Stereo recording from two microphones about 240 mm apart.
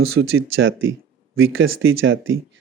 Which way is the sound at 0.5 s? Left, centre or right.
Right.